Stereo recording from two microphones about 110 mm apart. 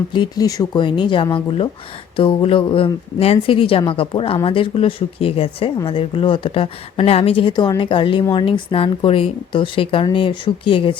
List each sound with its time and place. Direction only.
0.1 s speech: 45° left (ahead or behind)
0.4 s speech: 30° left (ahead or behind)
0.8 s speech: 45° left (ahead or behind)